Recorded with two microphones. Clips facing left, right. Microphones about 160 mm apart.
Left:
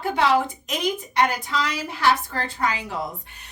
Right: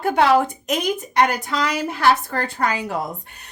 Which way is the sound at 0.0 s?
45° right (ahead or behind).